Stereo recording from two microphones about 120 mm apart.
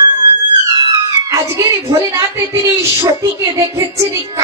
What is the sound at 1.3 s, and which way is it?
A woman's voice, 25° right (ahead or behind).